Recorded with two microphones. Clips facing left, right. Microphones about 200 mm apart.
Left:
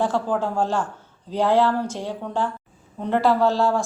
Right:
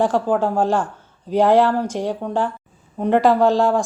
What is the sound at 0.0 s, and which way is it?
Speech, 15° right (ahead or behind).